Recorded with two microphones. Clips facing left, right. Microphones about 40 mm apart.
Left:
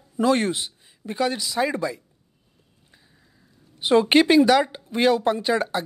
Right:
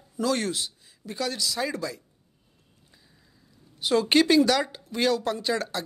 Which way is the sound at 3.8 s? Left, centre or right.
Left.